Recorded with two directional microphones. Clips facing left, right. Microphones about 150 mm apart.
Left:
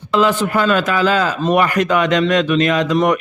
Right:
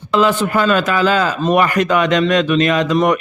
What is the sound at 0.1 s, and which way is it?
A man's voice, 35° right (ahead or behind).